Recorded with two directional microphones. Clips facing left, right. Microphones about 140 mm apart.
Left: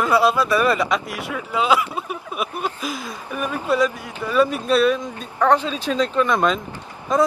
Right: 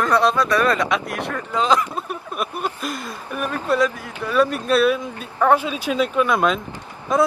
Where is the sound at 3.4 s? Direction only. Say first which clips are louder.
Even; 10° left (ahead or behind).